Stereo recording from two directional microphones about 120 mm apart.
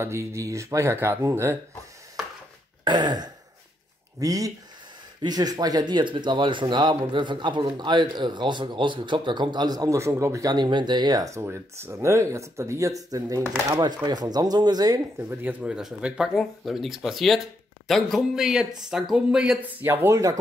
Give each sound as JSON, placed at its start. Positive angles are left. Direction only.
{"t": 0.0, "sound": "speech", "side_deg": -25}
{"t": 2.8, "sound": "throat clearing", "side_deg": -35}
{"t": 4.2, "sound": "speech", "side_deg": -30}
{"t": 15.2, "sound": "speech", "side_deg": -10}
{"t": 19.9, "sound": "speech", "side_deg": -20}